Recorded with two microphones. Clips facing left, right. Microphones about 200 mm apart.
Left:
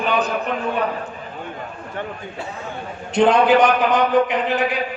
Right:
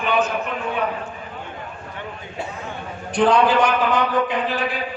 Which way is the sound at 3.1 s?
20° left (ahead or behind).